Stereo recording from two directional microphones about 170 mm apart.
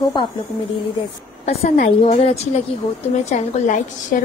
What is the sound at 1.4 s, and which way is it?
A woman's voice, 35° left (ahead or behind).